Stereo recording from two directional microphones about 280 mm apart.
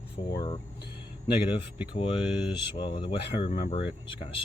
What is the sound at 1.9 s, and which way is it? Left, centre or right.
Speech, centre.